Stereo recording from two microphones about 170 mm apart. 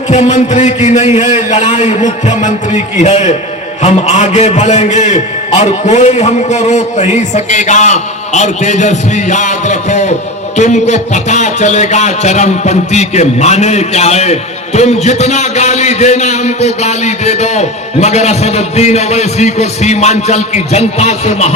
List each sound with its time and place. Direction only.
0.1 s a man's voice: 45° left (ahead or behind)